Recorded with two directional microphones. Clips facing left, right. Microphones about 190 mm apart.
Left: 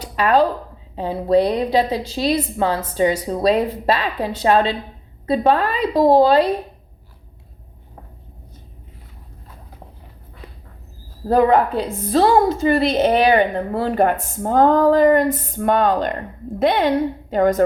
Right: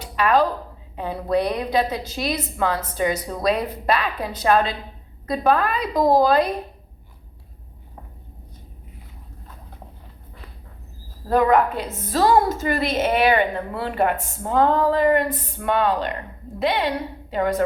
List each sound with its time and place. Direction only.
0.0 s a sound: 35° left (ahead or behind)
0.9 s a woman's voice: 25° left (ahead or behind)
11.3 s a woman's voice: 30° left (ahead or behind)